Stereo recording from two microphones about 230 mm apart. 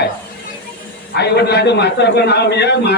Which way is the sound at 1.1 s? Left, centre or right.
Left.